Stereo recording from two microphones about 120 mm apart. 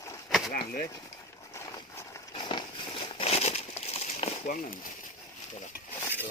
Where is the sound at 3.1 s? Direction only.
55° left (ahead or behind); by 4.7 s 75° left (ahead or behind).